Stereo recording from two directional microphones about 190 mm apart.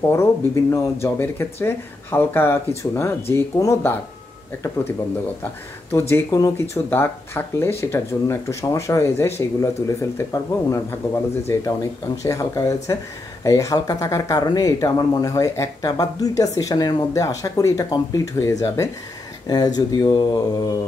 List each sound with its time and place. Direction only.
0.1 s speech: 15° left (ahead or behind)
5.4 s speech: 15° left (ahead or behind)
12.2 s speech: 15° left (ahead or behind)